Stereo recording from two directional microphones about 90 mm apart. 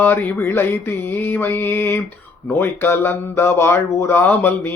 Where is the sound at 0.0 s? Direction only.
20° left (ahead or behind).